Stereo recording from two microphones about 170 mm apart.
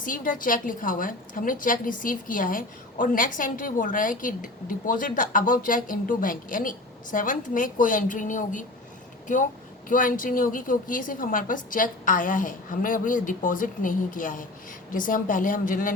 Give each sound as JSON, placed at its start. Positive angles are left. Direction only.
{"t": 0.0, "sound": "a woman's voice", "side_deg": 55}